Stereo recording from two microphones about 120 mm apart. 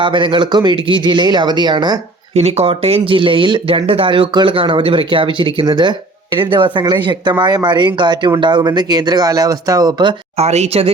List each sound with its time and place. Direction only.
0.0 s speech: 45° right (ahead or behind)
2.3 s speech: 60° right (ahead or behind); by 10.2 s 35° right (ahead or behind)
10.3 s speech: 65° right (ahead or behind)